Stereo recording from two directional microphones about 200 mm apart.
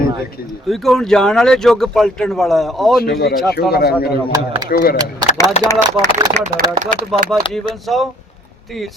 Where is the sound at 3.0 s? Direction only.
50° left (ahead or behind).